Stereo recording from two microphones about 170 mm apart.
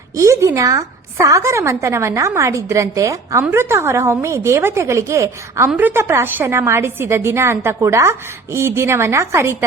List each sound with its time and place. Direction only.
0.2 s a woman's voice: 15° right (ahead or behind)